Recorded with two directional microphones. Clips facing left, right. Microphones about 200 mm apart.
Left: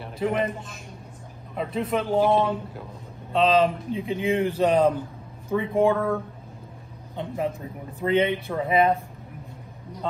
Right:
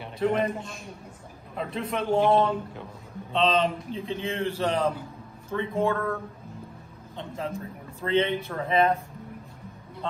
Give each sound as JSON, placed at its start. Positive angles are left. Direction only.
{"t": 0.0, "sound": "a man's voice", "side_deg": 5}
{"t": 4.1, "sound": "a man's voice", "side_deg": 15}
{"t": 7.2, "sound": "a man's voice", "side_deg": 15}